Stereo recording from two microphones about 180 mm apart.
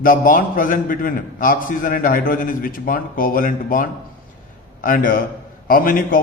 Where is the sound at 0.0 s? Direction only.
50° left (ahead or behind).